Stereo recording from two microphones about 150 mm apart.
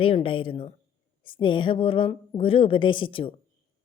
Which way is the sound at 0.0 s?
40° left (ahead or behind).